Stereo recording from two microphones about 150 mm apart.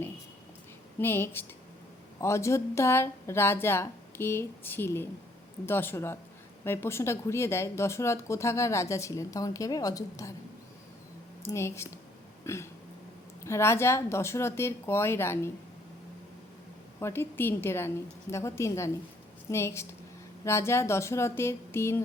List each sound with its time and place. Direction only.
0.9 s speech: 15° left (ahead or behind)
11.4 s speech: 15° left (ahead or behind)
17.0 s speech: 15° left (ahead or behind)